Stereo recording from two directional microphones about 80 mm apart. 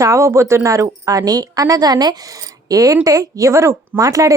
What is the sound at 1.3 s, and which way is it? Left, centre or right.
A woman's voice, right.